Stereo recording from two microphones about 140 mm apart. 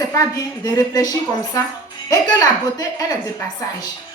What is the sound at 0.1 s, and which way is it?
A woman's voice, 25° left (ahead or behind).